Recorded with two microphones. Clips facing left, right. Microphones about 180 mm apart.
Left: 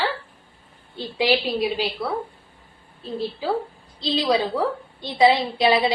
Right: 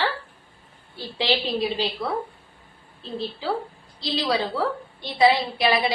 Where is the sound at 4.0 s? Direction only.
15° left (ahead or behind).